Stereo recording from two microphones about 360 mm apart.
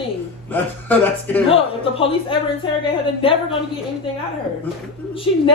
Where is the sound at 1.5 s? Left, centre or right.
Centre.